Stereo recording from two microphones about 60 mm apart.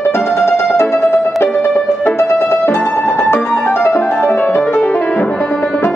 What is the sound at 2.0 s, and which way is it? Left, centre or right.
Music, left.